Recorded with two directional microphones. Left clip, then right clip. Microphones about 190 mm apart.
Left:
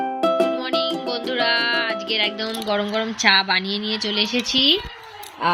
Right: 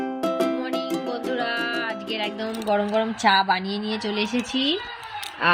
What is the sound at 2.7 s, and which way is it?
Speech, 5° right (ahead or behind).